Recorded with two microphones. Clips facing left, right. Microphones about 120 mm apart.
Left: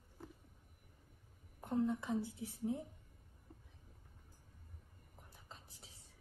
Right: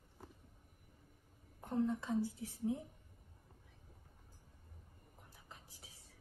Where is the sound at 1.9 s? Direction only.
15° left (ahead or behind).